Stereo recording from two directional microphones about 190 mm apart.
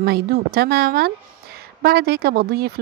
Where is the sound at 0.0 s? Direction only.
55° right (ahead or behind).